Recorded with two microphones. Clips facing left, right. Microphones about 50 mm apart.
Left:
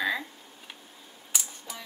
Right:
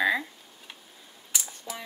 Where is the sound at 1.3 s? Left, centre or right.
Centre.